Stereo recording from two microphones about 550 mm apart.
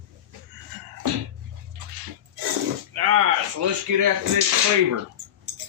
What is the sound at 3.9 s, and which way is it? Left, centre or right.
Speech, right.